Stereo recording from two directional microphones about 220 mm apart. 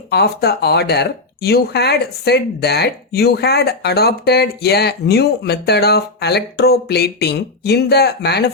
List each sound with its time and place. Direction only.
0.1 s speech: 45° left (ahead or behind)